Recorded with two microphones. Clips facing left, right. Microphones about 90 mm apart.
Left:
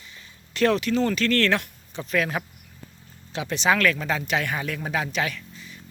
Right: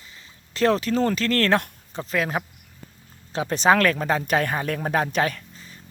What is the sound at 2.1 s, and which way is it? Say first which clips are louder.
Speech: even; 25° right (ahead or behind).